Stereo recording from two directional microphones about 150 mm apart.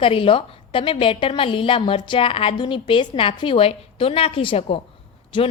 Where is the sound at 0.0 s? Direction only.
35° left (ahead or behind).